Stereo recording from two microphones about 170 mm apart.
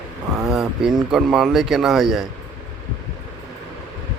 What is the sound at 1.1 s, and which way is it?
A man's voice, 5° right (ahead or behind).